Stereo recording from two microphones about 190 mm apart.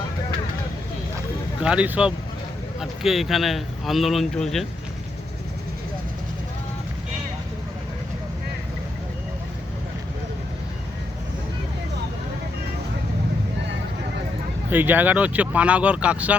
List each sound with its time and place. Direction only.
1.6 s speech: 5° right (ahead or behind)
14.7 s speech: 10° right (ahead or behind)